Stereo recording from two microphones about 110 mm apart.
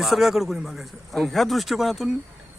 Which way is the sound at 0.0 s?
5° right (ahead or behind).